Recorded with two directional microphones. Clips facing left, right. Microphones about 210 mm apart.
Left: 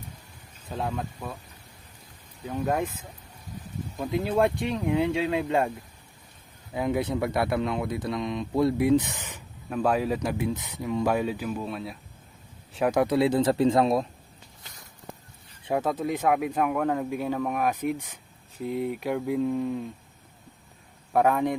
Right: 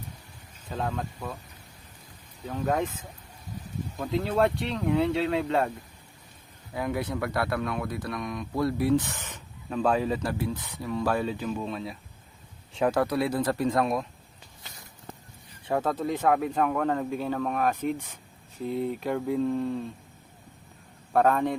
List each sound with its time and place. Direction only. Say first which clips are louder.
0.7 s speech: even; 5° left (ahead or behind)
2.5 s speech: even; 10° left (ahead or behind)
3.9 s speech: left 1 dB; 10° left (ahead or behind)
6.7 s speech: left 3 dB; 20° left (ahead or behind); by 11.9 s 5° left (ahead or behind)
12.9 s speech: left 6 dB; 20° left (ahead or behind)
15.7 s speech: left 1 dB; 10° left (ahead or behind)
21.1 s a man's voice: even; 10° left (ahead or behind)